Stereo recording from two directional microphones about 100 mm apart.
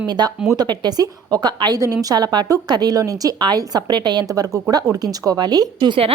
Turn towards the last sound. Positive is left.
turn(degrees=-50)  # may be behind; listen again after turning